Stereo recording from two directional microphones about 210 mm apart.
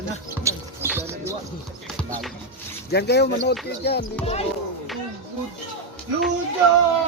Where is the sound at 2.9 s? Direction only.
50° left (ahead or behind).